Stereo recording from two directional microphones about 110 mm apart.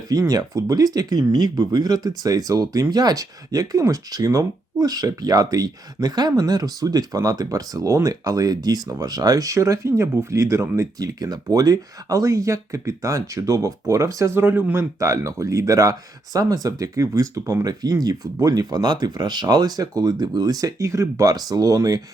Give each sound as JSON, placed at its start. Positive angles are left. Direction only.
{"t": 0.1, "sound": "speech", "side_deg": -35}